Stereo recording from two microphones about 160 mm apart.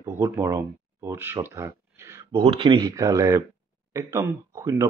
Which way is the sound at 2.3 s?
35° right (ahead or behind).